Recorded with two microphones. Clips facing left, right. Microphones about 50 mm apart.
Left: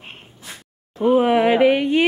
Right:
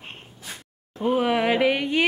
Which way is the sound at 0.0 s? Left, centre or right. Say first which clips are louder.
Left 1 dB; centre.